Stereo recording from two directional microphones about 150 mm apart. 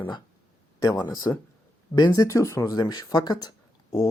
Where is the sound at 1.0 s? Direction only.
25° left (ahead or behind).